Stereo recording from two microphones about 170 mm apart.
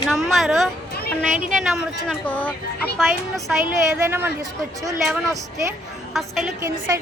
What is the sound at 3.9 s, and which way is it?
A woman's voice, 15° right (ahead or behind).